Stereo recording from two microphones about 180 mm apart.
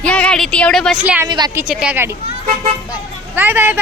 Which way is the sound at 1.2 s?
25° right (ahead or behind).